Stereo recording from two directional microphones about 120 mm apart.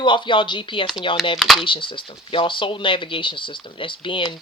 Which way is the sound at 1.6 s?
45° left (ahead or behind).